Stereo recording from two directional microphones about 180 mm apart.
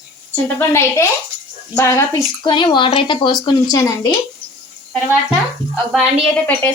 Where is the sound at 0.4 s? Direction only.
15° left (ahead or behind).